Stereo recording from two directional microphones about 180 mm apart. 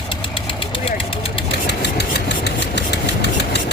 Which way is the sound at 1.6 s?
70° left (ahead or behind).